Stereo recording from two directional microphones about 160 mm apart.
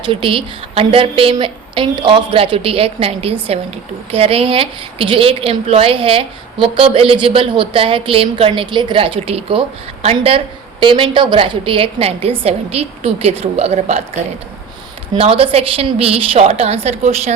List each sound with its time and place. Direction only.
0.0 s a woman's voice: 35° right (ahead or behind)
15.1 s a woman's voice: 35° right (ahead or behind)